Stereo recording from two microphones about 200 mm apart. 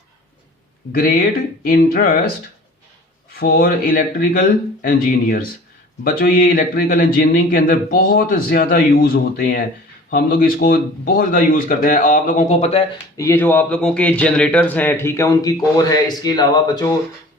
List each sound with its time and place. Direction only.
0.9 s a man's voice: 45° left (ahead or behind)
3.3 s a man's voice: 50° left (ahead or behind)
11.9 s a sound: 40° left (ahead or behind)
13.1 s a man's voice: 10° left (ahead or behind)